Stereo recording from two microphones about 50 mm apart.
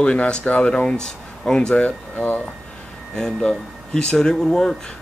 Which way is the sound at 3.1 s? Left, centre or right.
Centre.